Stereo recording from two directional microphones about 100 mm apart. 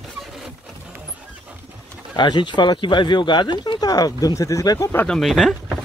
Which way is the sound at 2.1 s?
50° left (ahead or behind).